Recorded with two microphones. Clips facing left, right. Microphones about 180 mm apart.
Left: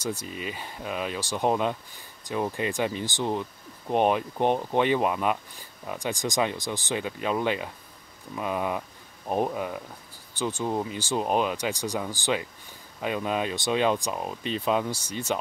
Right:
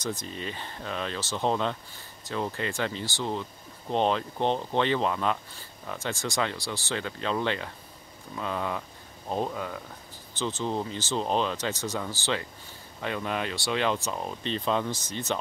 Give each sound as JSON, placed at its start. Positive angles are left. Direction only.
{"t": 0.0, "sound": "speech", "side_deg": 10}